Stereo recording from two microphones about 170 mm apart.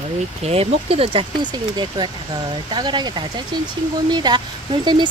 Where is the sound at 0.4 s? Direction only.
35° right (ahead or behind).